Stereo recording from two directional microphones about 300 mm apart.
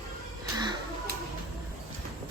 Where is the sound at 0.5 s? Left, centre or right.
Centre.